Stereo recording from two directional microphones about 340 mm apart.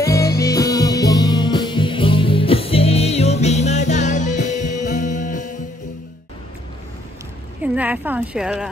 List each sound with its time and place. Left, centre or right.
0.0 s music: centre
7.6 s speech: centre